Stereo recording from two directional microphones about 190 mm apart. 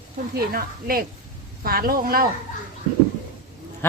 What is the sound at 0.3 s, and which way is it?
A woman's voice, 50° right (ahead or behind).